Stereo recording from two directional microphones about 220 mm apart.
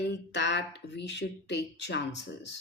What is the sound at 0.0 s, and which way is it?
Speech, 50° left (ahead or behind).